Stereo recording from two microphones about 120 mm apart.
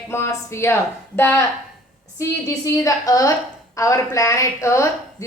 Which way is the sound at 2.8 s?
30° left (ahead or behind).